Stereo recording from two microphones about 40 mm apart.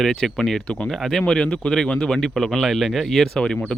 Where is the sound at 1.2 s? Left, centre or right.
Centre.